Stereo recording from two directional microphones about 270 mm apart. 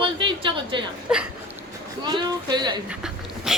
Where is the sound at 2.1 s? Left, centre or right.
Centre.